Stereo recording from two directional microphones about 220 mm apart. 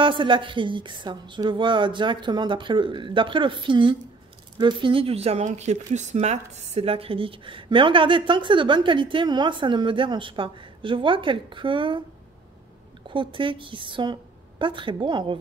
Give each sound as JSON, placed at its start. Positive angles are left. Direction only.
{"t": 0.0, "sound": "speech", "side_deg": -20}
{"t": 13.1, "sound": "a woman's voice", "side_deg": -20}